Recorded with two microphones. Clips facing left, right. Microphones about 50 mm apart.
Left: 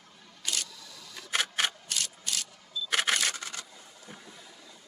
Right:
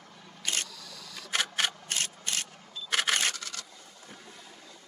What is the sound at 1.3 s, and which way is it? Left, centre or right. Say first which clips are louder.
Camera: even; centre.